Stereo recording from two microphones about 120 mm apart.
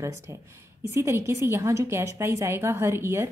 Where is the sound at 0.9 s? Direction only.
25° right (ahead or behind).